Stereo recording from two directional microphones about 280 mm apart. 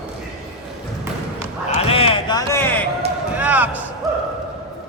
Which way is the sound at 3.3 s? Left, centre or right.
Centre.